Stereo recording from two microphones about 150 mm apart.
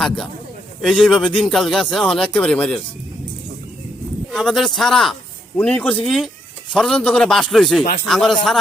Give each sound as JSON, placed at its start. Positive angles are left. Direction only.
{"t": 0.8, "sound": "speech", "side_deg": 0}
{"t": 4.3, "sound": "speech", "side_deg": 0}